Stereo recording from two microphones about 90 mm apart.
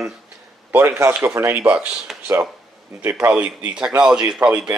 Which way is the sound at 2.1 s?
5° right (ahead or behind).